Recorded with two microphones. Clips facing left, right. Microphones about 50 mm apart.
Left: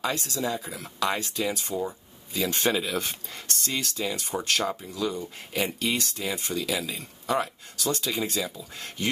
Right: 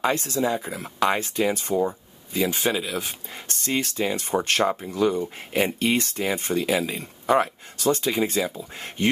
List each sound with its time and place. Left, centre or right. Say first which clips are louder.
0.0 s speech: right 6 dB; right
1.8 s speech: right 7 dB; right
2.6 s speech: right 1 dB; centre
3.4 s speech: right 5 dB; right